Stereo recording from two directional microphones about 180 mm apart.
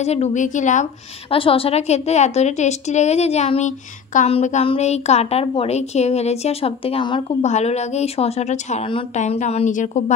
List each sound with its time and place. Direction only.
0.0 s a woman's voice: 35° left (ahead or behind)
1.3 s a woman's voice: 30° left (ahead or behind)
7.4 s a woman's voice: 40° left (ahead or behind)